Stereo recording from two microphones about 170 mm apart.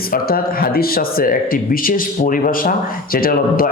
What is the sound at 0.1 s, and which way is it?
Speech, 60° left (ahead or behind).